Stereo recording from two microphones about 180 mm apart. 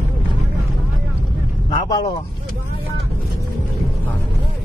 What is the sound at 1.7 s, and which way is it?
Vehicle, 25° left (ahead or behind).